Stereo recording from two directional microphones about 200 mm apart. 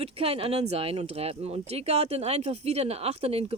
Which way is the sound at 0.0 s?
30° right (ahead or behind).